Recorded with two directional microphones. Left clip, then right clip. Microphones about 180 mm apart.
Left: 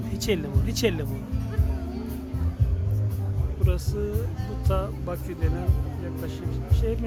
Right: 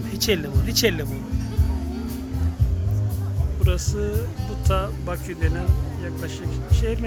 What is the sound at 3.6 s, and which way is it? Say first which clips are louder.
Speech: right 4 dB; 10° right (ahead or behind).